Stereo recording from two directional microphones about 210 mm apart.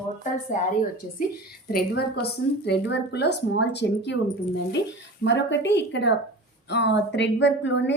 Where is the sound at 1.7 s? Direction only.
50° left (ahead or behind).